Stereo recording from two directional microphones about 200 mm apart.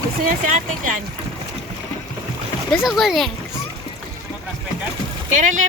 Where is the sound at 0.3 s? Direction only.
40° right (ahead or behind).